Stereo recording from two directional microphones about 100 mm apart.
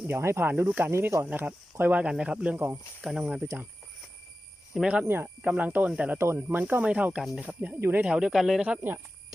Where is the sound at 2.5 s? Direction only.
25° right (ahead or behind).